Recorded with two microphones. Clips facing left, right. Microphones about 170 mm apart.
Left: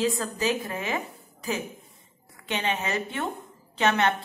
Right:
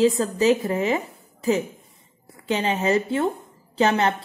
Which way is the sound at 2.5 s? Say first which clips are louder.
Right 7 dB; 35° right (ahead or behind).